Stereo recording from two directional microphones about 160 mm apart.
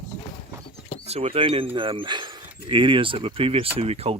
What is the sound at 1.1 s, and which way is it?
Speech, 40° right (ahead or behind).